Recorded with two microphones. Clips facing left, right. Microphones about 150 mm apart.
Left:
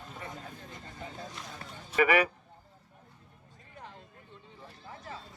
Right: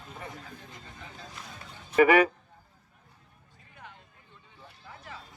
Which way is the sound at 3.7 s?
40° left (ahead or behind).